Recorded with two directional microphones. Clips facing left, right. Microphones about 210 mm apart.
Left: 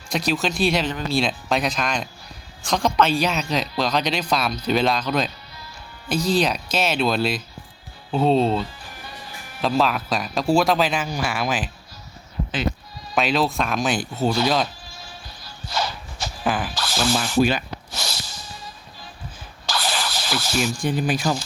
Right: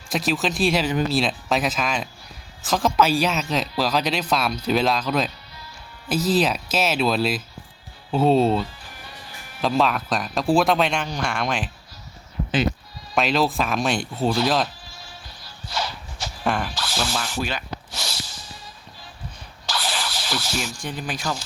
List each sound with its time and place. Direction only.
0.1 s speech: centre (ahead or behind)
13.1 s speech: centre (ahead or behind)
15.7 s shuffle: 45° left (ahead or behind)
16.4 s a sound: centre (ahead or behind)
16.7 s sanding: 45° left (ahead or behind)
17.2 s speech: 10° left (ahead or behind)
17.9 s a sound: 45° left (ahead or behind)
19.6 s sanding: 45° left (ahead or behind)
20.6 s speech: 10° left (ahead or behind)